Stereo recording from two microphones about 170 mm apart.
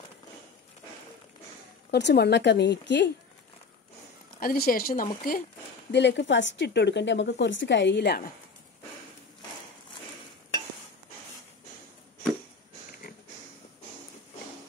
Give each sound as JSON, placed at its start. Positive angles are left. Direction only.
{"t": 1.9, "sound": "a woman's voice", "side_deg": 80}
{"t": 4.4, "sound": "a woman's voice", "side_deg": 60}
{"t": 5.9, "sound": "a woman's voice", "side_deg": 90}
{"t": 13.0, "sound": "pig", "side_deg": 55}